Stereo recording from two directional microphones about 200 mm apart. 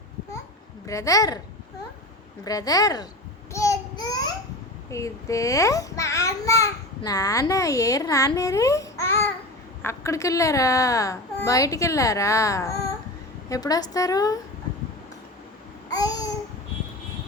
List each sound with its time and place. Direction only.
0.9 s a child's voice: 15° left (ahead or behind)
2.4 s a child's voice: 15° left (ahead or behind)
3.5 s a sound: 15° left (ahead or behind)
4.9 s a child's voice: 15° left (ahead or behind)
15.9 s babbling: 20° left (ahead or behind)